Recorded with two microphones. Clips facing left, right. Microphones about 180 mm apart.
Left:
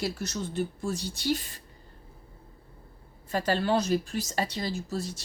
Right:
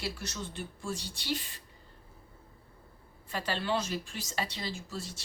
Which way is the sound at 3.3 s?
45° left (ahead or behind).